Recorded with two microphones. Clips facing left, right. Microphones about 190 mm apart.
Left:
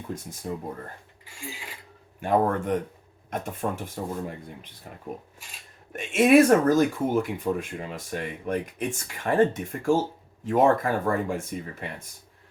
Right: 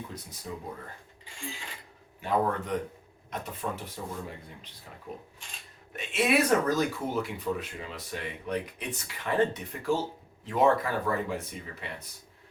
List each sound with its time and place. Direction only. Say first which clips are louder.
0.1 s speech: left 7 dB; 50° left (ahead or behind)
2.2 s speech: left 5 dB; 50° left (ahead or behind)